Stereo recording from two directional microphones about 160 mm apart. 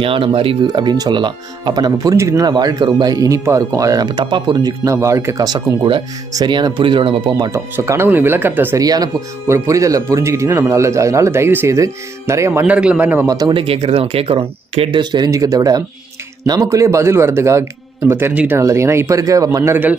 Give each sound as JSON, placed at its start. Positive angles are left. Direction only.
{"t": 0.0, "sound": "speech", "side_deg": -35}
{"t": 8.8, "sound": "speech", "side_deg": -25}
{"t": 13.3, "sound": "speech", "side_deg": -25}